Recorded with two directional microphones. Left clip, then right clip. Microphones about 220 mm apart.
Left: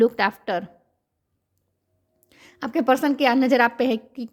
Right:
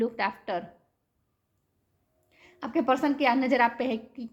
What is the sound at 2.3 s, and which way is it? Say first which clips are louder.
Speech: left 4 dB; 50° left (ahead or behind).